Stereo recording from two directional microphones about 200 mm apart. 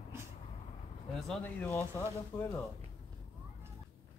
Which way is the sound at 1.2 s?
5° left (ahead or behind).